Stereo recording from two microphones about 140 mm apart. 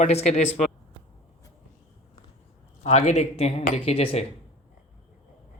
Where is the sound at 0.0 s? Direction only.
50° left (ahead or behind).